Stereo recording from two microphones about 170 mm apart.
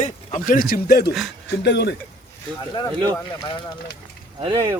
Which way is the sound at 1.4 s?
80° left.